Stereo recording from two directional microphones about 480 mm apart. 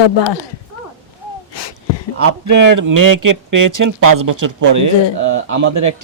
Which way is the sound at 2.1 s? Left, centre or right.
Right.